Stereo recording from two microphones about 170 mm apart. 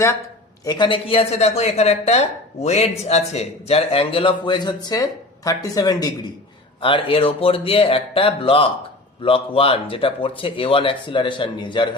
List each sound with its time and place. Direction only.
0.6 s speech: 25° left (ahead or behind)